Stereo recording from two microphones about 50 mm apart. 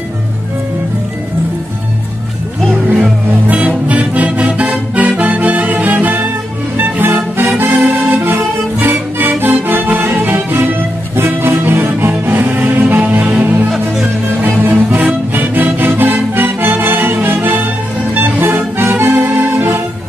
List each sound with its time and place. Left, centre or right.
3.4 s music: right